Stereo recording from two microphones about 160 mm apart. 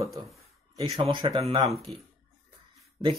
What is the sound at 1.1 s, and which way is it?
Speech, 30° right (ahead or behind).